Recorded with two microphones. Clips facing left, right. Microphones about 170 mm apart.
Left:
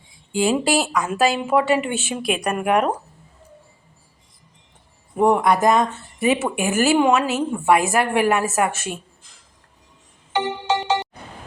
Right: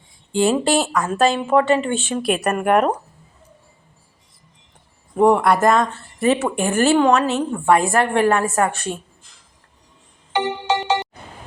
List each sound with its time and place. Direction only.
0.5 s a woman's voice: 5° left (ahead or behind)
2.2 s speech: centre (ahead or behind)
5.1 s a woman's voice: centre (ahead or behind)
10.3 s ringtone: 70° right (ahead or behind)